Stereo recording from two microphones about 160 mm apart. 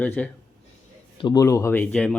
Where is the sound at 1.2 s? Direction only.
30° left (ahead or behind).